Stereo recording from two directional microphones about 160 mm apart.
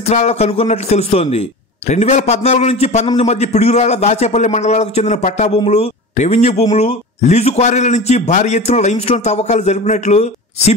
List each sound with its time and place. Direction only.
0.0 s a man's voice: 40° left (ahead or behind)